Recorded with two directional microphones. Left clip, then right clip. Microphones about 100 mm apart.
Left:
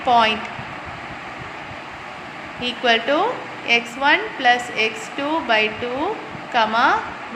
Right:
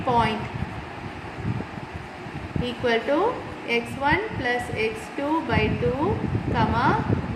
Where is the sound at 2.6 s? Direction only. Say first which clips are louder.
Left 5 dB; 20° left (ahead or behind).